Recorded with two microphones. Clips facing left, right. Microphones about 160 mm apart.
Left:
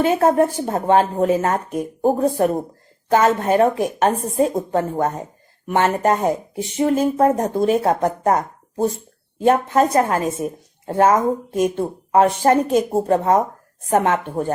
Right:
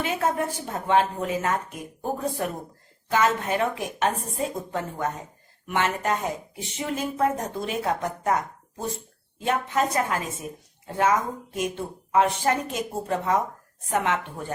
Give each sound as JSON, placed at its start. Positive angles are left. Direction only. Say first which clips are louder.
{"t": 0.0, "sound": "a woman's voice", "louder": "left 10 dB", "side_deg": 40}